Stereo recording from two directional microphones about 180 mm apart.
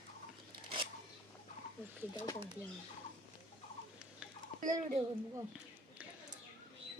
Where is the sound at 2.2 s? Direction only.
20° left (ahead or behind).